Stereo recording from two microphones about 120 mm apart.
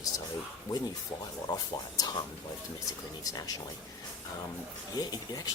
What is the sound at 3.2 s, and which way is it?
Speech, 30° left (ahead or behind).